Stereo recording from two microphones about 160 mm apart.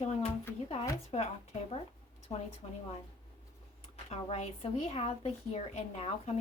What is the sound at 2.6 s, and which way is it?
Speech, 45° left (ahead or behind).